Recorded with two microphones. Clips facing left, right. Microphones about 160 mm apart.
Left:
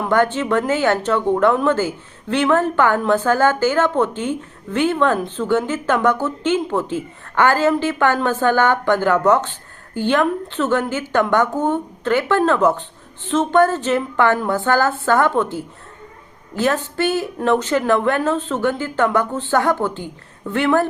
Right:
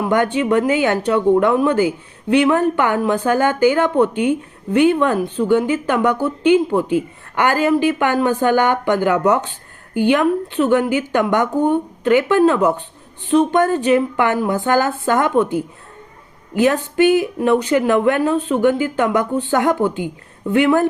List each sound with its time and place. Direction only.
0.0 s speech: 15° right (ahead or behind)